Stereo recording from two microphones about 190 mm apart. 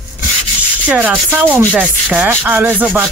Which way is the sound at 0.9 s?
10° right (ahead or behind).